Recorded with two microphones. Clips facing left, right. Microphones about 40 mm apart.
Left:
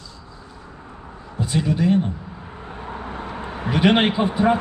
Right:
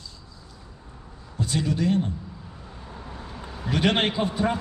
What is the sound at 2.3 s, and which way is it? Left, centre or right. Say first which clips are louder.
Vehicle: left 7 dB; left.